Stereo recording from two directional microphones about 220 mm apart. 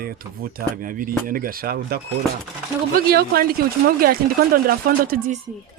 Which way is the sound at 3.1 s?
45° right (ahead or behind).